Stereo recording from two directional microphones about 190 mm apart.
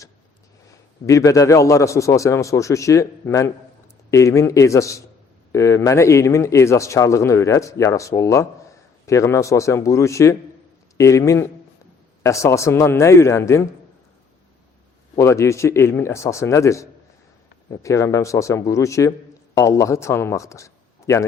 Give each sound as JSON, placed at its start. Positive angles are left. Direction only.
{"t": 1.0, "sound": "speech", "side_deg": 15}
{"t": 15.1, "sound": "a man's voice", "side_deg": 15}